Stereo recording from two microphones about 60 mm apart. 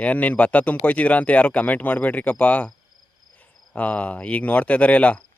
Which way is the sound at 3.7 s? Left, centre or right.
Left.